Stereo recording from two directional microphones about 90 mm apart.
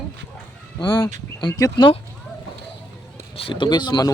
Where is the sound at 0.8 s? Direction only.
50° left (ahead or behind).